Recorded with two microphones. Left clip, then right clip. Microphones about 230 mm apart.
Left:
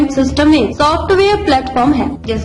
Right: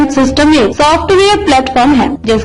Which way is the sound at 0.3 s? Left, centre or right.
Right.